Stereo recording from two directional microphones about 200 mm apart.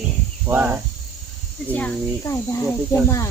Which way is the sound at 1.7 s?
5° left (ahead or behind).